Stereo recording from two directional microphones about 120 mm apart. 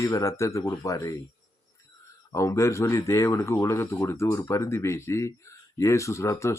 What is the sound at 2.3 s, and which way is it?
Speech, 25° left (ahead or behind).